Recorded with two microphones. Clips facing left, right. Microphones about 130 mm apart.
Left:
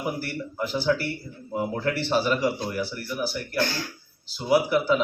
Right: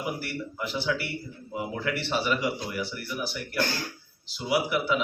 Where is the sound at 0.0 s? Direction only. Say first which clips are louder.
Left 3 dB; 40° left (ahead or behind).